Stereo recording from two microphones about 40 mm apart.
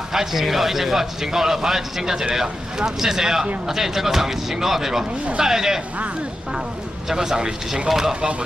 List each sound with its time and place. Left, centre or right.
0.1 s speech: centre
7.1 s speech: centre